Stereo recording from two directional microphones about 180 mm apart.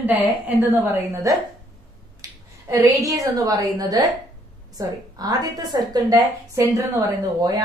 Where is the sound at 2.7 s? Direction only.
20° right (ahead or behind).